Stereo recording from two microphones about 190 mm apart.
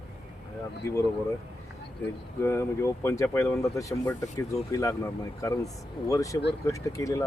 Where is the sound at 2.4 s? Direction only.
15° left (ahead or behind).